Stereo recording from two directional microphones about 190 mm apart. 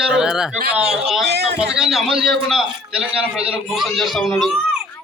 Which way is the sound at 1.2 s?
60° right (ahead or behind).